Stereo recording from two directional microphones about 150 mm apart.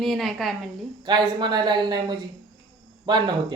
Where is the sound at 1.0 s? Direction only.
30° right (ahead or behind).